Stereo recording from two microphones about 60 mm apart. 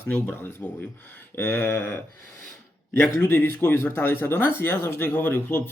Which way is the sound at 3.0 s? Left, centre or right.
Left.